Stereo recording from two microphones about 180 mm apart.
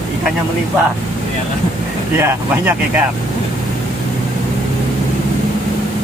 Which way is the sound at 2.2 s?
10° right (ahead or behind).